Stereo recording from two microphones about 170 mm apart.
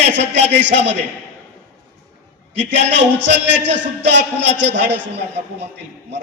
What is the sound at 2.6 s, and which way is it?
Music, 90° right.